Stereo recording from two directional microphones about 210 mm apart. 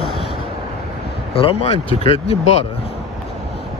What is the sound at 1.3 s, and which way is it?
Speech, 25° left (ahead or behind).